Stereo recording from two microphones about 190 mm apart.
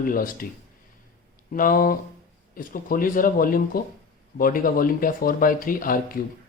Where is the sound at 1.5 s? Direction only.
45° left (ahead or behind).